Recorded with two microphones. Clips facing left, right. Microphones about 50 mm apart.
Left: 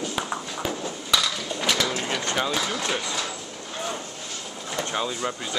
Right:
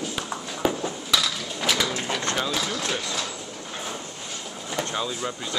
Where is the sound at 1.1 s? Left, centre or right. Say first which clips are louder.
Left 2 dB; centre.